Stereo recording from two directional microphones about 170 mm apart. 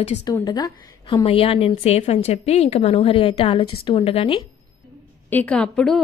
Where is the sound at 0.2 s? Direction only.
25° left (ahead or behind).